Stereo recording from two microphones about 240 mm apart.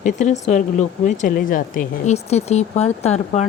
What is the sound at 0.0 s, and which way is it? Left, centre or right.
Speech, left.